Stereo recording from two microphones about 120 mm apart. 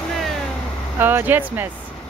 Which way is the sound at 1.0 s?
15° right (ahead or behind).